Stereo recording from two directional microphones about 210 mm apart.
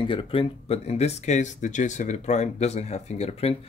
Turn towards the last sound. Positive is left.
turn(degrees=30)  # may be behind; listen again after turning